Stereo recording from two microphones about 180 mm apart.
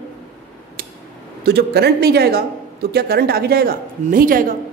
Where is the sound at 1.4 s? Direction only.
65° right (ahead or behind).